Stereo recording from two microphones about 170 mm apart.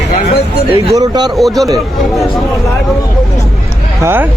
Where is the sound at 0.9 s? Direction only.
25° right (ahead or behind).